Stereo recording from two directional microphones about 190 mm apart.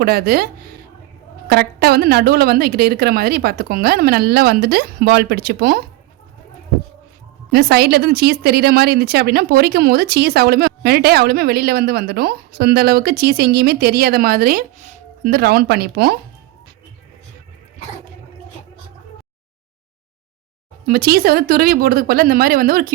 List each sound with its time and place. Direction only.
0.0 s a woman's voice: 55° right (ahead or behind)
7.5 s speech: 55° right (ahead or behind)
20.8 s a woman's voice: 50° right (ahead or behind)